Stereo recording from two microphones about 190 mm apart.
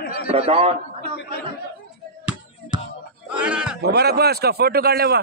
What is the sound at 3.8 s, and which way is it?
A man's voice, 60° right (ahead or behind).